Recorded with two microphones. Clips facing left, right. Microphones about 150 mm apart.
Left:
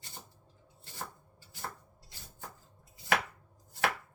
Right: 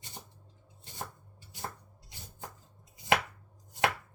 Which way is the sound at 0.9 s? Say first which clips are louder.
Right 1 dB; 20° right (ahead or behind).